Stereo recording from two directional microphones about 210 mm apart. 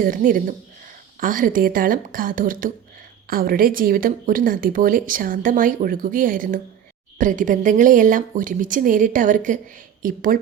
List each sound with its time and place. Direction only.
0.0 s speech: 40° right (ahead or behind)